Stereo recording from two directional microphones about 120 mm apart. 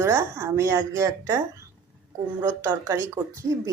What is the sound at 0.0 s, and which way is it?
A woman's voice, 20° right (ahead or behind).